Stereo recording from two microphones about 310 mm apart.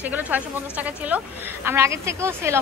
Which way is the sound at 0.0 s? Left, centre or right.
Centre.